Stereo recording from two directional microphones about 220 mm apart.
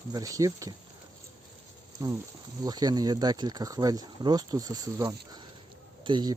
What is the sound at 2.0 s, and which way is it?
Speech, 15° right (ahead or behind).